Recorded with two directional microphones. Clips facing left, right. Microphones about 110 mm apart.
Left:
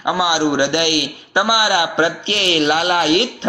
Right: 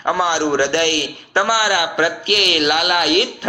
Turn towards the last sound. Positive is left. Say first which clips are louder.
# left 1 dB
turn(degrees=25)  # may be behind; listen again after turning